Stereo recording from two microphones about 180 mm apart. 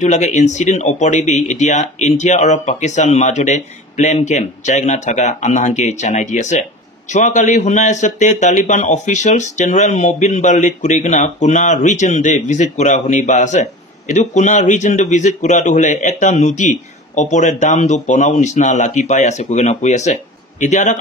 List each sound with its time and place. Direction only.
0.0 s speech: 40° left (ahead or behind)